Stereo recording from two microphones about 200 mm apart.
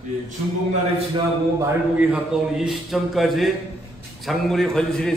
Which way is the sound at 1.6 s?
5° right (ahead or behind).